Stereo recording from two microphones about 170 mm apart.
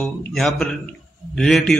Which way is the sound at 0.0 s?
Centre (ahead or behind).